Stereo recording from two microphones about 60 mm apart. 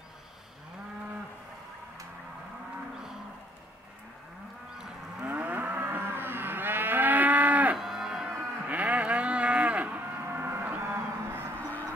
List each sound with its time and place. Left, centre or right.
5.2 s moo: right
7.7 s livestock: centre
8.3 s cattle: right
9.9 s a sound: right